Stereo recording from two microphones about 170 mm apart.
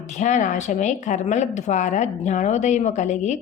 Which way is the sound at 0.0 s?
45° left (ahead or behind).